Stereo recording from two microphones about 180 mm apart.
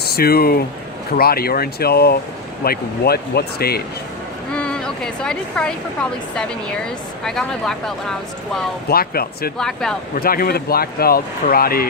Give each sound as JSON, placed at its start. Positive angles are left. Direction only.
{"t": 0.0, "sound": "speech", "side_deg": 60}
{"t": 4.5, "sound": "speech", "side_deg": 5}
{"t": 8.9, "sound": "speech", "side_deg": 55}
{"t": 9.6, "sound": "speech", "side_deg": 5}
{"t": 10.2, "sound": "speech", "side_deg": 55}